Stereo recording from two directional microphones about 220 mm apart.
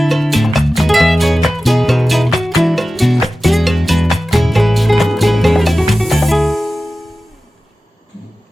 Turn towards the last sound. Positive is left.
turn(degrees=0)  # may be behind; listen again after turning